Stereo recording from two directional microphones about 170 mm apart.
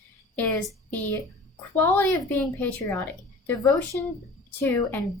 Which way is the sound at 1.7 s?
10° left (ahead or behind).